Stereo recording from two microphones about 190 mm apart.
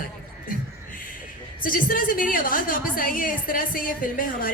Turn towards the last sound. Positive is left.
turn(degrees=50)  # may be behind; listen again after turning